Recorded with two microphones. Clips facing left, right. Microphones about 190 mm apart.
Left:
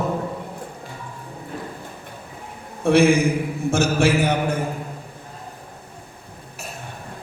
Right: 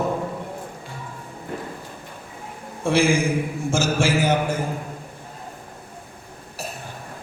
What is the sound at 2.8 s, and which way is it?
A man's voice, 60° left (ahead or behind).